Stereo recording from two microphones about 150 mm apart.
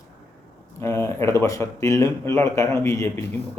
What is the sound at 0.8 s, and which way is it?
Speech, 20° left (ahead or behind).